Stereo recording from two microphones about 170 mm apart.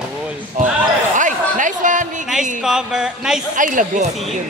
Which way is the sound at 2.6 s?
5° right (ahead or behind).